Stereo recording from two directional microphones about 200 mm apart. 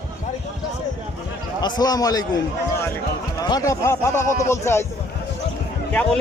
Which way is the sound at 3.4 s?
15° left (ahead or behind).